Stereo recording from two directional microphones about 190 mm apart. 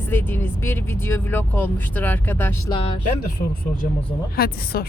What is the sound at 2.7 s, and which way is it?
Speech, 25° left (ahead or behind).